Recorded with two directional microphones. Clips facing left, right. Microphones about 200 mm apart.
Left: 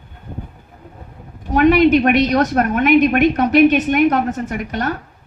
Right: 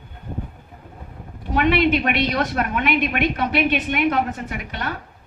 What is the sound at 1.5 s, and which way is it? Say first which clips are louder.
A woman's voice: left 7 dB; 45° left (ahead or behind).